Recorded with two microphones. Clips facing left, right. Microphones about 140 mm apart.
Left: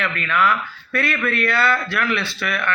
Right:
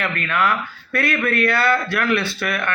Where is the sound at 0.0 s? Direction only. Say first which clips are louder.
Left 1 dB; 50° right (ahead or behind).